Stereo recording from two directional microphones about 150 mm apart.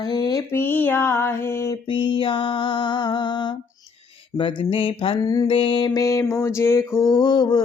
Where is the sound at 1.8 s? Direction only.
35° left (ahead or behind).